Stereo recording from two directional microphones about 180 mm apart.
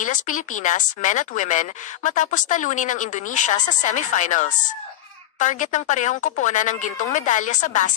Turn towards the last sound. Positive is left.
turn(degrees=45)  # may be behind; listen again after turning